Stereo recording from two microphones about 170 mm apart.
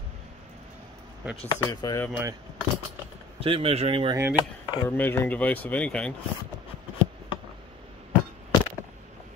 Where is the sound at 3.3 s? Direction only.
35° right (ahead or behind).